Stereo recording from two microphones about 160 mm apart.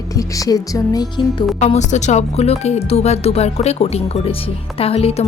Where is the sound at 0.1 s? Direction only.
20° left (ahead or behind).